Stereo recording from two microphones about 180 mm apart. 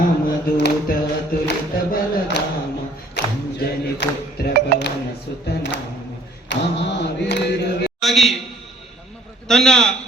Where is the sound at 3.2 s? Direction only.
70° left (ahead or behind).